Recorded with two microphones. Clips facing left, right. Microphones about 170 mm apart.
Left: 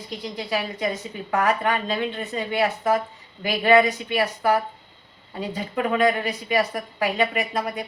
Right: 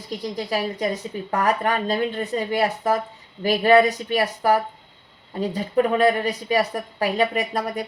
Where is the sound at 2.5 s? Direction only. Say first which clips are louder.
Left 1 dB; 40° right (ahead or behind).